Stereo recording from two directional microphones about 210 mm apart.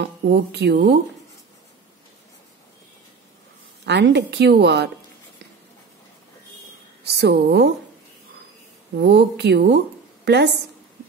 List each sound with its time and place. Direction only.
0.0 s a woman's voice: 50° right (ahead or behind)
3.8 s a woman's voice: 55° right (ahead or behind)
7.1 s a woman's voice: 50° right (ahead or behind)
8.9 s a woman's voice: 55° right (ahead or behind)